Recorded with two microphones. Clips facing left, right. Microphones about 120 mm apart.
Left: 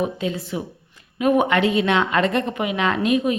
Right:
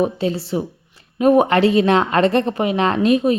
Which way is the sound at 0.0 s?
35° right (ahead or behind).